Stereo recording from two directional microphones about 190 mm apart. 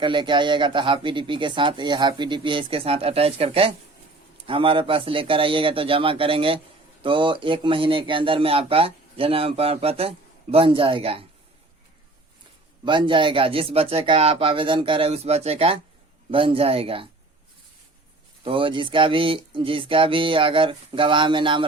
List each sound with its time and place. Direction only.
0.0 s speech: 25° right (ahead or behind)
12.8 s speech: 25° right (ahead or behind)
18.4 s speech: 25° right (ahead or behind)